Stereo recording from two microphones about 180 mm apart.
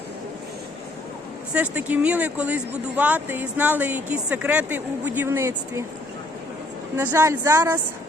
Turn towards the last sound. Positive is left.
turn(degrees=-15)  # may be behind; listen again after turning